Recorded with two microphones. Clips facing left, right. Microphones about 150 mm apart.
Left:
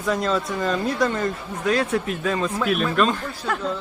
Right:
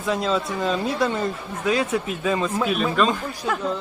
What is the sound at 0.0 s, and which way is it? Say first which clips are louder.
A man's voice: even; 5° right (ahead or behind).